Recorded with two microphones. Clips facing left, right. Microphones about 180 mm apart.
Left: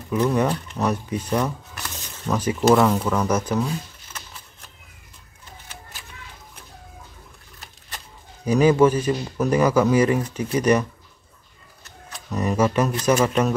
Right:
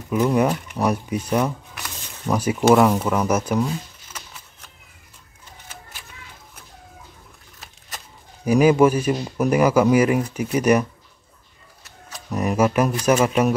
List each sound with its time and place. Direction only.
0.1 s speech: 10° right (ahead or behind)
8.5 s speech: 10° right (ahead or behind)